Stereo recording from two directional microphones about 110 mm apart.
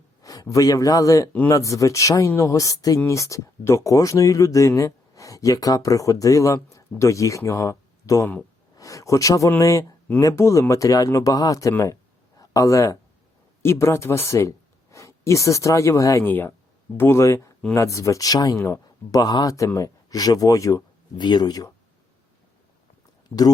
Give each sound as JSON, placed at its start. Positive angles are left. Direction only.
{"t": 0.2, "sound": "a man's voice", "side_deg": 30}
{"t": 16.2, "sound": "speech", "side_deg": 15}
{"t": 21.2, "sound": "speech", "side_deg": 40}